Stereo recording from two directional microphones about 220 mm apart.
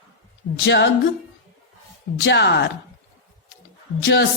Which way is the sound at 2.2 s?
50° left (ahead or behind).